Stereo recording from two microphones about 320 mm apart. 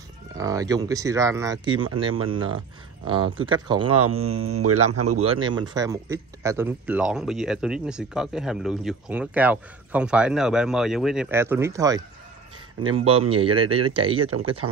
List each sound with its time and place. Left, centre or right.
0.4 s speech: centre
3.9 s a man's voice: right
5.2 s speech: centre